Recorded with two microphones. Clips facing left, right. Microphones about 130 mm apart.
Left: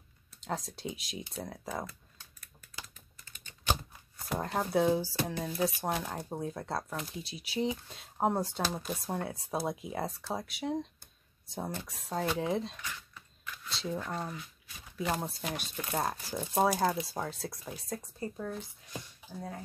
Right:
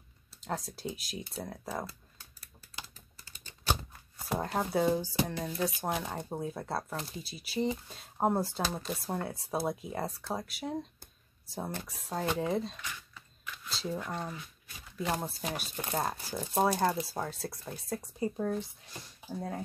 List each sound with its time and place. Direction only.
0.4 s speech: centre (ahead or behind)
2.4 s typing: 30° right (ahead or behind)
4.2 s speech: centre (ahead or behind)